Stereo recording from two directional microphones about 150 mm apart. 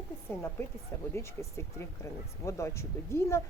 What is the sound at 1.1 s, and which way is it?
Speech, 20° left (ahead or behind).